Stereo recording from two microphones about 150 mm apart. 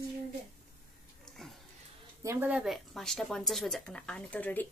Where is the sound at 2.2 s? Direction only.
15° right (ahead or behind).